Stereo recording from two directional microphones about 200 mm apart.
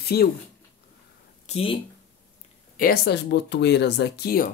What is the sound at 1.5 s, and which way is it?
Speech, 30° left (ahead or behind).